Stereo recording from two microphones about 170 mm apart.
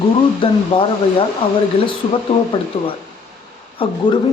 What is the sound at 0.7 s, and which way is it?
Speech, 30° left (ahead or behind).